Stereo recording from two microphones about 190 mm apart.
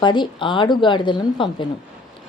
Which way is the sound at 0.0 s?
25° left (ahead or behind).